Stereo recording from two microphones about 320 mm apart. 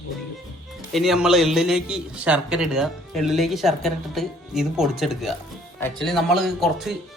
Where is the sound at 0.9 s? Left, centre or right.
Centre.